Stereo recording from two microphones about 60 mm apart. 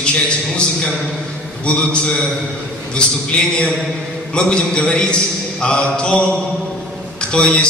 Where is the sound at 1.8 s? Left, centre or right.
Centre.